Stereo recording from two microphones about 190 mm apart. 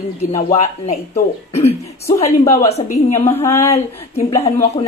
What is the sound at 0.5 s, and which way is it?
Speech, 35° left (ahead or behind).